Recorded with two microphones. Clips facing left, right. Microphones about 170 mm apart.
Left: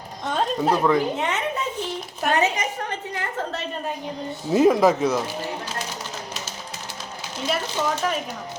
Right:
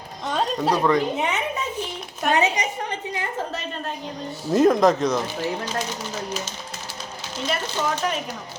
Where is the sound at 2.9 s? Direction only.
15° right (ahead or behind).